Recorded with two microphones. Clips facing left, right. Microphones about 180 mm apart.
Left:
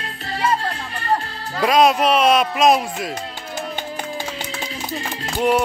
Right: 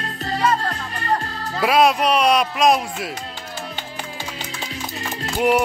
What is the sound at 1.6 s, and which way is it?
Speech, 5° right (ahead or behind).